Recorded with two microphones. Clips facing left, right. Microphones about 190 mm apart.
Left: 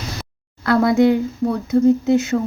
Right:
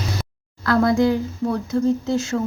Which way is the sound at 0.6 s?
20° left (ahead or behind).